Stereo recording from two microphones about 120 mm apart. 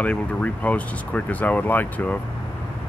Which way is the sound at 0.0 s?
10° left (ahead or behind).